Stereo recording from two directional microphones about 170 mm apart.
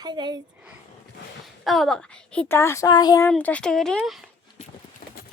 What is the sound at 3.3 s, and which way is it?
Speech, 5° left (ahead or behind).